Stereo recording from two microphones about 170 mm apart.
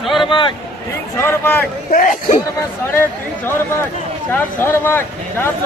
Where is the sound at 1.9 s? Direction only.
50° left (ahead or behind).